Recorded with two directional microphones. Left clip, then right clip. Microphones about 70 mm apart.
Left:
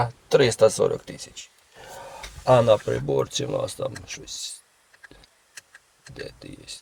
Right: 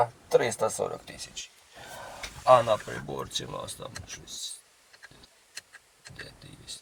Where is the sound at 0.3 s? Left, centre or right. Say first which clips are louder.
Left 7 dB; centre.